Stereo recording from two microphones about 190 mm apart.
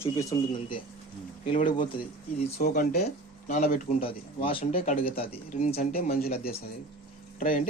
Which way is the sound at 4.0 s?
30° left (ahead or behind).